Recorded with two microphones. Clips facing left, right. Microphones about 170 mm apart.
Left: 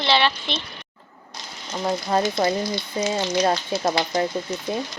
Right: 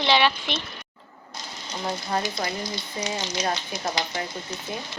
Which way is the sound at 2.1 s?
30° left (ahead or behind).